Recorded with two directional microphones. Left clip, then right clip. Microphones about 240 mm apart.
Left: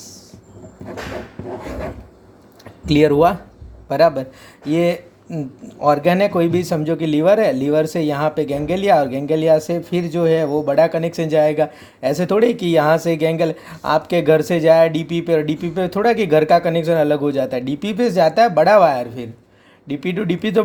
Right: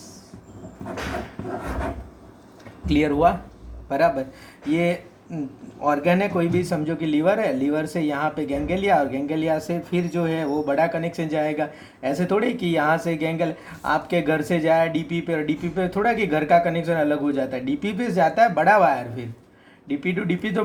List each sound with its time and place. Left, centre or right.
2.8 s speech: left